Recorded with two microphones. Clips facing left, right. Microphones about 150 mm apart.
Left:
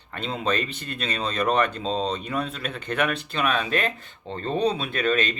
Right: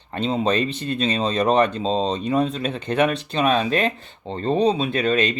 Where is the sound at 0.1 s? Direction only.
30° right (ahead or behind).